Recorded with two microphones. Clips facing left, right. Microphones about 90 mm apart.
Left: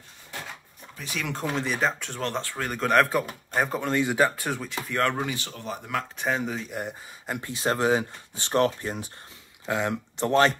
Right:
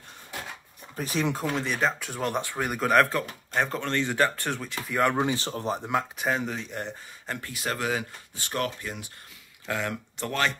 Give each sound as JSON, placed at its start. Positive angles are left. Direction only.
{"t": 0.9, "sound": "speech", "side_deg": -40}
{"t": 1.3, "sound": "speech", "side_deg": 0}
{"t": 3.5, "sound": "speech", "side_deg": 10}
{"t": 5.2, "sound": "speech", "side_deg": -35}
{"t": 6.1, "sound": "speech", "side_deg": 0}
{"t": 7.5, "sound": "speech", "side_deg": 30}
{"t": 9.7, "sound": "speech", "side_deg": 20}